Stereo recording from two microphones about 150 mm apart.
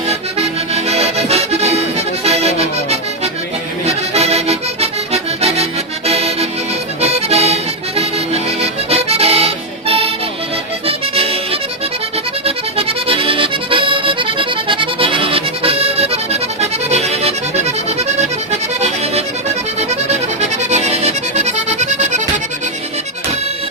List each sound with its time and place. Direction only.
0.1 s accordion: 45° right (ahead or behind)
2.2 s music: 45° right (ahead or behind)
3.8 s accordion: 45° right (ahead or behind)
7.0 s music: 45° right (ahead or behind)
12.5 s accordion: 40° right (ahead or behind)
19.9 s accordion: 50° right (ahead or behind)